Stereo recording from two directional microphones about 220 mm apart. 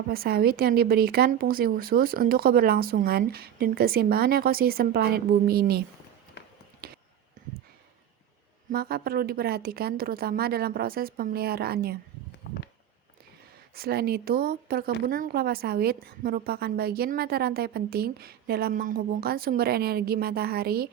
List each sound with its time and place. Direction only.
0.1 s a woman's voice: 45° right (ahead or behind)
6.8 s a sound: 45° right (ahead or behind)
8.7 s a woman's voice: 45° right (ahead or behind)
13.7 s a woman's voice: 45° right (ahead or behind)